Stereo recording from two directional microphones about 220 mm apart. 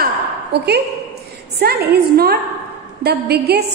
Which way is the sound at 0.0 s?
50° right (ahead or behind).